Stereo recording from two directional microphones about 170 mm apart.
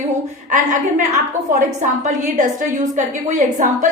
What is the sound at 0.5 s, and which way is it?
Speech, 50° right (ahead or behind).